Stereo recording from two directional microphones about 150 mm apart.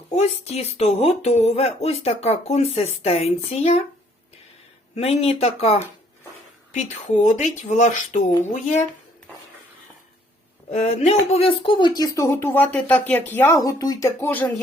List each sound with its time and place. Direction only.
0.2 s speech: 45° left (ahead or behind)
4.9 s speech: 40° left (ahead or behind)
6.7 s speech: 55° left (ahead or behind)
10.7 s speech: 50° left (ahead or behind); by 14.5 s 15° left (ahead or behind)